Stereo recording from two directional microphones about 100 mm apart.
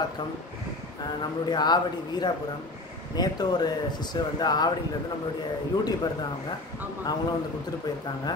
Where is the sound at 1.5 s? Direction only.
45° left (ahead or behind).